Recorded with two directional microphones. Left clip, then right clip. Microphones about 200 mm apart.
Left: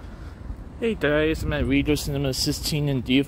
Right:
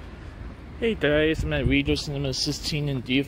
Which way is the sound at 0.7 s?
Centre (ahead or behind).